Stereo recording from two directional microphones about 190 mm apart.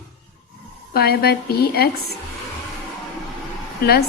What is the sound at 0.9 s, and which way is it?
A woman's voice, 55° left (ahead or behind).